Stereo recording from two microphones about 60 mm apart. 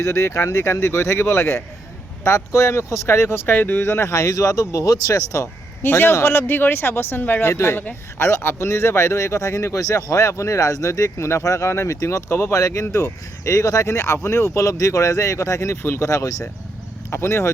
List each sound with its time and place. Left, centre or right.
0.0 s speech: left
5.8 s speech: left
7.5 s speech: left
16.0 s speech: left
17.1 s speech: left